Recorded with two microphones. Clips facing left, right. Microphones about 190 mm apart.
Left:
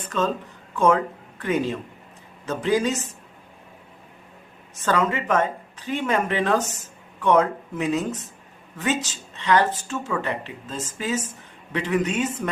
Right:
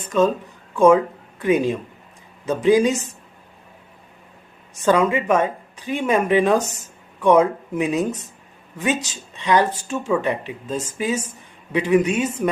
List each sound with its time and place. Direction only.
0.1 s speech: 15° right (ahead or behind)
4.7 s speech: 15° right (ahead or behind)